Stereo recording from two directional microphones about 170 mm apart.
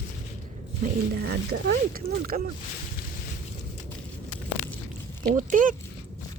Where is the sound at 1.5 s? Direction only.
60° right (ahead or behind).